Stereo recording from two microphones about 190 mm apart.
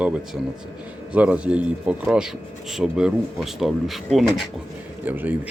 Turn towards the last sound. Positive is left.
turn(degrees=-10)  # may be behind; listen again after turning